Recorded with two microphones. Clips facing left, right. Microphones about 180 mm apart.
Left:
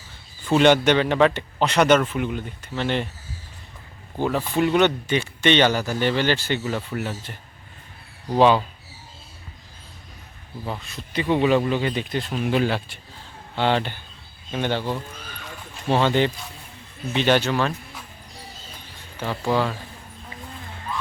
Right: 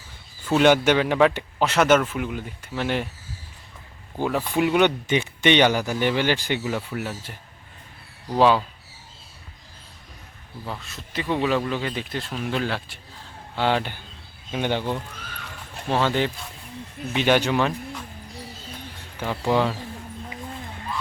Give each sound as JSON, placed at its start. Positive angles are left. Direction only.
{"t": 0.6, "sound": "speech", "side_deg": -5}
{"t": 4.2, "sound": "speech", "side_deg": -5}
{"t": 8.4, "sound": "speech", "side_deg": 0}
{"t": 10.7, "sound": "speech", "side_deg": 0}
{"t": 15.9, "sound": "speech", "side_deg": 0}
{"t": 19.2, "sound": "speech", "side_deg": -15}